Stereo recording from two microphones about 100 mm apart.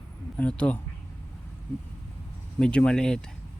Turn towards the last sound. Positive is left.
turn(degrees=5)  # may be behind; listen again after turning